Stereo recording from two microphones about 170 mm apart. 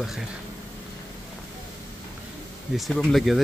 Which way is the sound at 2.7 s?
Centre (ahead or behind).